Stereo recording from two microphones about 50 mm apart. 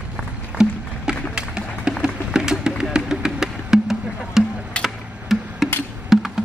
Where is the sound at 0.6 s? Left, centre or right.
Centre.